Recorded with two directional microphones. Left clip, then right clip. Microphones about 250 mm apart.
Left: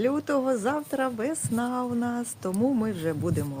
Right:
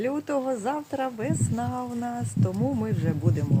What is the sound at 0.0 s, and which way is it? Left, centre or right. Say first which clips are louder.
A woman's voice: left 2 dB; left.